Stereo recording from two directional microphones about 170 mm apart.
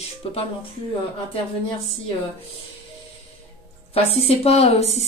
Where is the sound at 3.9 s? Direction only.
35° left (ahead or behind).